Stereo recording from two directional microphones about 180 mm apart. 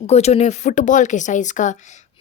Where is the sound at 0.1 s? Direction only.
35° left (ahead or behind).